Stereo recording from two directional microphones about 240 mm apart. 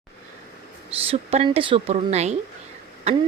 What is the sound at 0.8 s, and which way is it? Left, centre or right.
A woman's voice, right.